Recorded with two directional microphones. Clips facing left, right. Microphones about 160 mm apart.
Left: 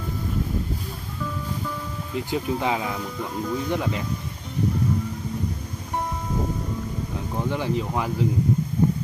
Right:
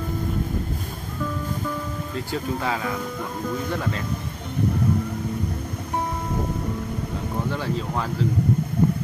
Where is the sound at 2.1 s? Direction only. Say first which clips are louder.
Left 3 dB; 15° left (ahead or behind).